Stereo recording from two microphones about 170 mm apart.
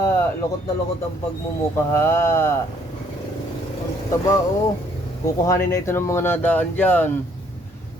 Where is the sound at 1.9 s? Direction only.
15° left (ahead or behind).